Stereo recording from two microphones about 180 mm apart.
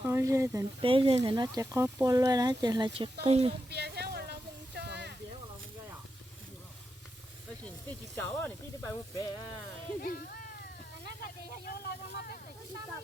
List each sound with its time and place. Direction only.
0.1 s speech: 15° right (ahead or behind)
0.8 s speech: 30° right (ahead or behind)
3.7 s a sound: 65° right (ahead or behind)
8.1 s speech: 5° left (ahead or behind)
10.0 s speech: 55° left (ahead or behind)
11.2 s a sound: 55° left (ahead or behind)